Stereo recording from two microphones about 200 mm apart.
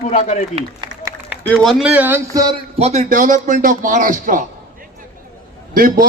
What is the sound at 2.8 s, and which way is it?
Speech, 35° right (ahead or behind).